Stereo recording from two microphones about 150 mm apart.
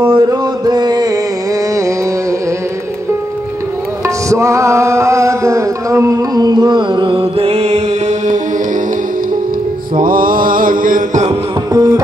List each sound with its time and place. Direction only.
0.1 s a sound: 25° right (ahead or behind)
4.3 s music: 20° right (ahead or behind); by 8.4 s 50° right (ahead or behind)
9.9 s mantra: 70° right (ahead or behind)
11.7 s music: 25° right (ahead or behind)